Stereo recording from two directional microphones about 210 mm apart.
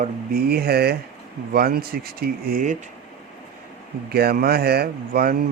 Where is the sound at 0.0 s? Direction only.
45° right (ahead or behind).